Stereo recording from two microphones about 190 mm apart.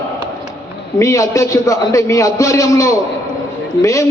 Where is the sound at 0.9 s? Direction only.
15° left (ahead or behind).